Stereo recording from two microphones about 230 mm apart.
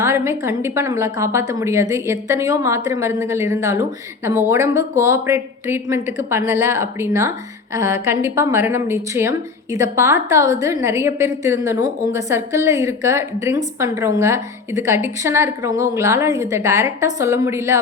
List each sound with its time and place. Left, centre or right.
0.0 s a woman's voice: centre